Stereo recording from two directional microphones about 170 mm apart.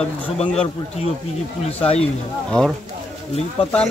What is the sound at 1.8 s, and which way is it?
Speech, 35° left (ahead or behind).